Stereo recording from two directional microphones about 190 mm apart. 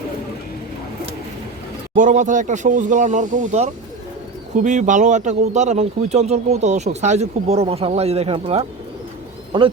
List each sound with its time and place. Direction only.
2.0 s speech: 40° right (ahead or behind); by 9.7 s 25° right (ahead or behind)